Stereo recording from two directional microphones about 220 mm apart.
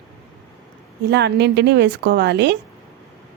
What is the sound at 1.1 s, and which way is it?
Speech, 50° right (ahead or behind).